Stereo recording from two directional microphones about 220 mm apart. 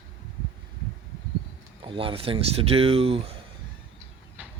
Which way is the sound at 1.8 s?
25° right (ahead or behind).